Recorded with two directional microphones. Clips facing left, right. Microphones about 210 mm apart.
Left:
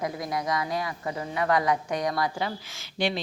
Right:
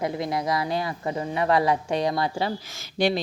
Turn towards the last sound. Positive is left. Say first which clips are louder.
# right 5 dB
turn(degrees=-40)  # may be behind; listen again after turning